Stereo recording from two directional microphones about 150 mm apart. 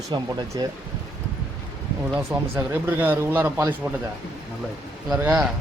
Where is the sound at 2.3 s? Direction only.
25° right (ahead or behind).